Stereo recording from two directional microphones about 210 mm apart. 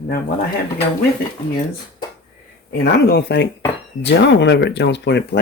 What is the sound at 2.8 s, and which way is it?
Speech, 50° left (ahead or behind).